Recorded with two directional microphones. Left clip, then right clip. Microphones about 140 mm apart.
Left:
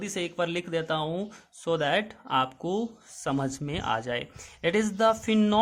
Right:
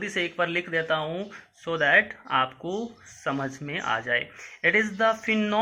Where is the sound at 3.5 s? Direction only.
60° left (ahead or behind).